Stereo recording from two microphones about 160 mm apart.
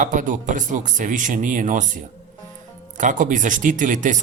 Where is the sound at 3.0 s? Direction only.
55° right (ahead or behind).